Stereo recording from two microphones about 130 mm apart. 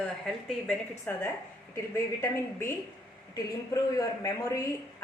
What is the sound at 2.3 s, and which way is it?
Speech, 20° left (ahead or behind).